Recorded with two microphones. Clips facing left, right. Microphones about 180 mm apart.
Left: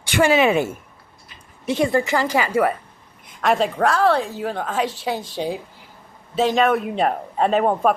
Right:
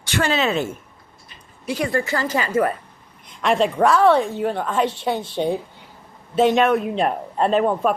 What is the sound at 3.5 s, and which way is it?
Speech, centre (ahead or behind).